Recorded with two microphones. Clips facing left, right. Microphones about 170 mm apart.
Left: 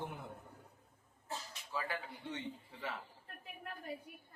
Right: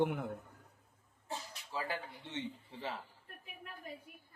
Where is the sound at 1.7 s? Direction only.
30° right (ahead or behind).